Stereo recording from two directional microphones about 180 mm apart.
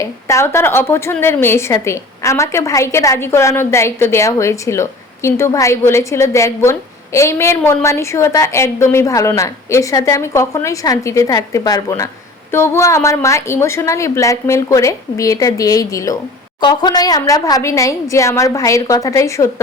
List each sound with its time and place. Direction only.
0.0 s a woman's voice: 15° left (ahead or behind)